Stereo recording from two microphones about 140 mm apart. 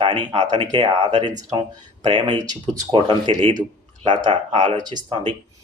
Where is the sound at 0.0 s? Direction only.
35° right (ahead or behind).